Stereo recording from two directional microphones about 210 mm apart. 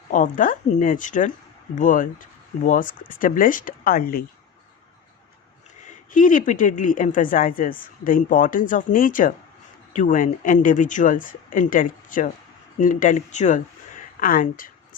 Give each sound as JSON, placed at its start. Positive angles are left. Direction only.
{"t": 0.1, "sound": "a woman's voice", "side_deg": 40}
{"t": 6.1, "sound": "a woman's voice", "side_deg": 40}